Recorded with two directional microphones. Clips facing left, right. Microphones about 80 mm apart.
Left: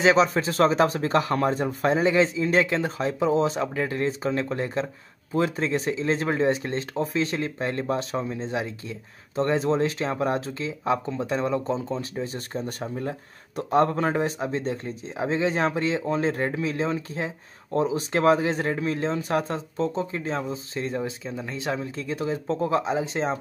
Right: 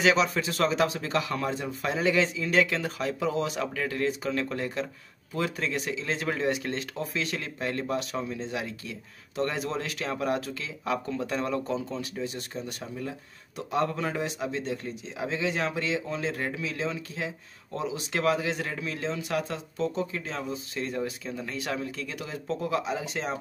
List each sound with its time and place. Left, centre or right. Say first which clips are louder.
0.0 s speech: left 4 dB; left
2.0 s speech: left 2 dB; left